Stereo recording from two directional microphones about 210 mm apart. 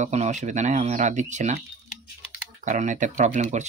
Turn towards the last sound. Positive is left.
turn(degrees=-35)  # may be behind; listen again after turning